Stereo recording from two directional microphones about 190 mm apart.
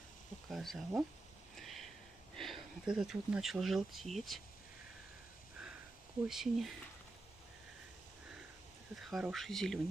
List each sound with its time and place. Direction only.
0.5 s speech: centre (ahead or behind)
1.6 s a sound: centre (ahead or behind)
2.3 s speech: centre (ahead or behind)
6.2 s speech: centre (ahead or behind)
9.0 s speech: centre (ahead or behind)